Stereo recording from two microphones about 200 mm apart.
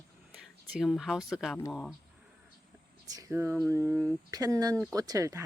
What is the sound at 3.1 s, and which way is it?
Speech, 15° right (ahead or behind).